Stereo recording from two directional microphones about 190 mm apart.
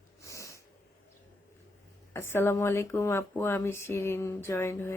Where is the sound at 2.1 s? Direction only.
15° left (ahead or behind).